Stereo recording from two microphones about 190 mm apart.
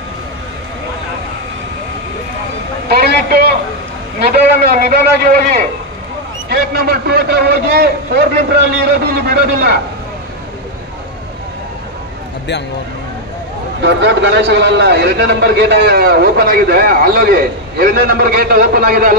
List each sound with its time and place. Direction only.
2.9 s vehicle: 55° right (ahead or behind)
4.2 s a man's voice: 55° right (ahead or behind)
13.7 s a man's voice: 65° right (ahead or behind)